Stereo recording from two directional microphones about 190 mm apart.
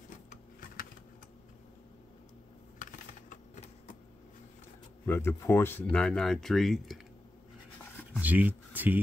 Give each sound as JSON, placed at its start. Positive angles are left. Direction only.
{"t": 0.3, "sound": "a sound", "side_deg": 45}
{"t": 2.8, "sound": "typing", "side_deg": 40}
{"t": 5.0, "sound": "speech", "side_deg": 10}
{"t": 8.2, "sound": "speech", "side_deg": -10}